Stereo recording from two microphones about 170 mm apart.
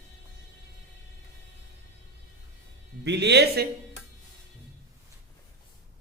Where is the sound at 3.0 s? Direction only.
80° right.